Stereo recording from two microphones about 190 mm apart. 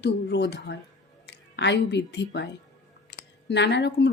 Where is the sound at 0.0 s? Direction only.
65° left (ahead or behind).